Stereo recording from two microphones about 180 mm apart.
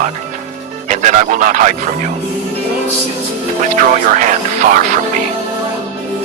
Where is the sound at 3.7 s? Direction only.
45° right (ahead or behind).